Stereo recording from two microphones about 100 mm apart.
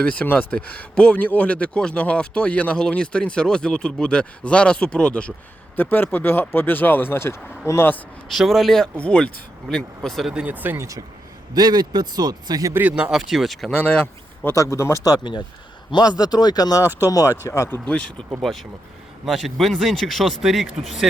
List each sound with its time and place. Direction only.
0.0 s a man's voice: 15° left (ahead or behind)
8.3 s speech: centre (ahead or behind)
10.3 s speech: 15° right (ahead or behind)
10.8 s speech: 35° right (ahead or behind)
12.7 s speech: 15° right (ahead or behind)
13.1 s speech: centre (ahead or behind)
13.8 s speech: 15° left (ahead or behind)
14.5 s a man's voice: 30° left (ahead or behind)
16.8 s speech: 20° right (ahead or behind)
17.1 s a man's voice: 35° left (ahead or behind)
17.8 s a man's voice: 10° left (ahead or behind)
18.5 s speech: centre (ahead or behind)